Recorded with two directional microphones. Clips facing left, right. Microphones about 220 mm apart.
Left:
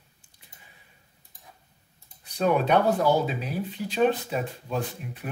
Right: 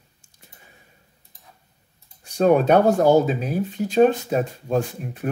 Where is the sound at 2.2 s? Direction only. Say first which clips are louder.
Right 7 dB; 45° right (ahead or behind).